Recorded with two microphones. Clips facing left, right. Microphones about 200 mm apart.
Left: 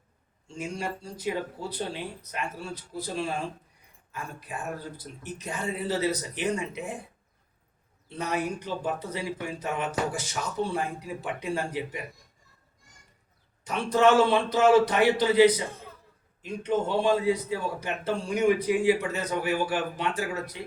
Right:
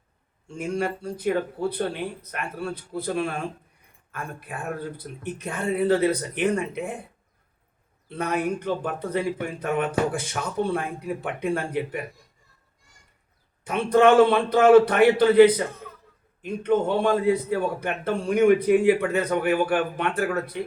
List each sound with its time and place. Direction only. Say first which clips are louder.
0.4 s a man's voice: right 6 dB; 55° right (ahead or behind)
8.1 s a man's voice: right 4 dB; 55° right (ahead or behind)
13.7 s a man's voice: right 4 dB; 55° right (ahead or behind)